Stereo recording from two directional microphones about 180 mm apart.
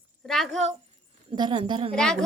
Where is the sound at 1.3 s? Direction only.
30° right (ahead or behind).